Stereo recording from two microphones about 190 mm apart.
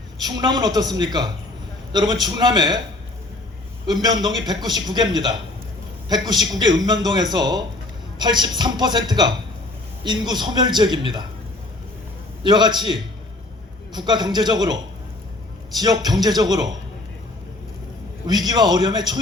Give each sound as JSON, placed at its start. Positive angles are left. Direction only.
{"t": 0.2, "sound": "a man's voice", "side_deg": -20}
{"t": 3.8, "sound": "a man's voice", "side_deg": -20}
{"t": 12.4, "sound": "a man's voice", "side_deg": -20}
{"t": 18.3, "sound": "a man's voice", "side_deg": -20}